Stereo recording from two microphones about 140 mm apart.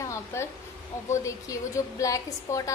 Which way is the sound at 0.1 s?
20° left (ahead or behind).